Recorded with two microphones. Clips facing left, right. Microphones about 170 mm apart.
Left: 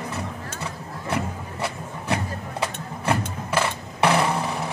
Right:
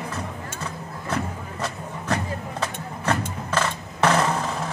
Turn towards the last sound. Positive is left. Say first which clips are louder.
# even
turn(degrees=10)  # may be behind; listen again after turning